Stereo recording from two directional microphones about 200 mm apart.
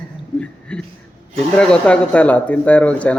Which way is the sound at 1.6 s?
5° left (ahead or behind).